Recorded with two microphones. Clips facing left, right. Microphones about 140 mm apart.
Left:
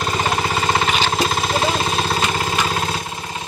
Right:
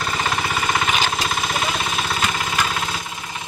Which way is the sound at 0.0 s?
30° left (ahead or behind).